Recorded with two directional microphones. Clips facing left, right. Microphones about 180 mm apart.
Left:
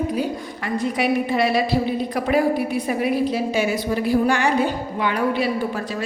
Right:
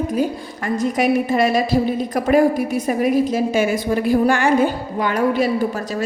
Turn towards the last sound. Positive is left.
turn(degrees=-45)  # may be behind; listen again after turning